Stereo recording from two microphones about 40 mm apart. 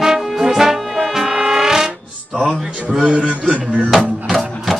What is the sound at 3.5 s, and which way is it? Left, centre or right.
Music, right.